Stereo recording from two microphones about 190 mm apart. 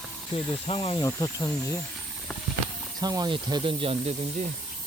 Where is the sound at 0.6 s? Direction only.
30° left (ahead or behind).